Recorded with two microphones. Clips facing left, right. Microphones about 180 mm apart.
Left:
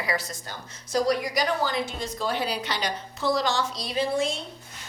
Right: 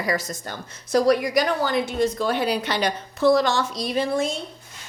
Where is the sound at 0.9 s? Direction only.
60° right (ahead or behind).